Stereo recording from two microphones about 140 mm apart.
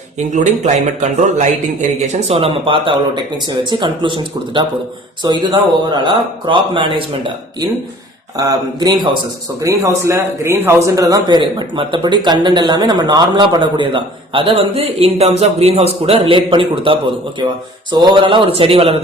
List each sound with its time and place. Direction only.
0.2 s speech: 60° right (ahead or behind)
2.1 s a man's voice: 50° right (ahead or behind)